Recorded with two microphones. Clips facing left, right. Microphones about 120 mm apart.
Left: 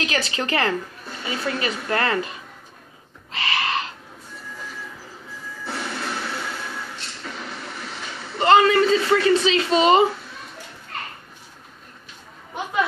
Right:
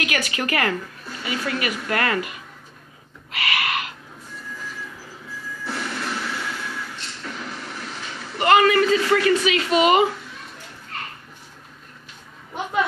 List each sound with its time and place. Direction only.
0.0 s speech: 30° left (ahead or behind)
3.3 s owl: 30° left (ahead or behind)
5.6 s music: 25° left (ahead or behind)
8.4 s a man's voice: 25° left (ahead or behind)